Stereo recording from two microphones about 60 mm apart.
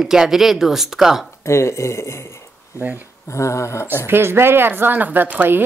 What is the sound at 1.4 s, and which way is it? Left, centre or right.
Speech, left.